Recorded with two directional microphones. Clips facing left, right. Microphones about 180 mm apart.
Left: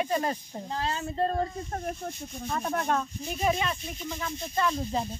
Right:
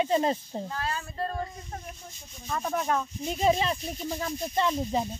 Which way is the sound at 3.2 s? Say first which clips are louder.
Right 4 dB; 25° right (ahead or behind).